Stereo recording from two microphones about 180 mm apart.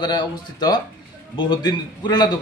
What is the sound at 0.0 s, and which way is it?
A man's voice, 25° left (ahead or behind).